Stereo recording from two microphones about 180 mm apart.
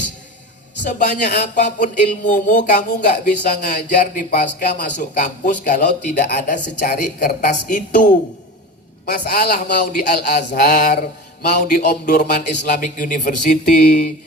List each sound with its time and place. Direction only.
0.9 s a man's voice: 45° left (ahead or behind)
9.0 s mantra: 60° left (ahead or behind)
11.4 s a man's voice: 50° left (ahead or behind)